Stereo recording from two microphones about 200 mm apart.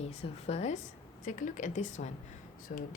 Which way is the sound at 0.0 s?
30° left (ahead or behind).